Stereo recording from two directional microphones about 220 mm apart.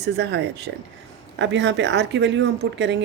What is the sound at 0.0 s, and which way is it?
A woman's voice, 50° right (ahead or behind).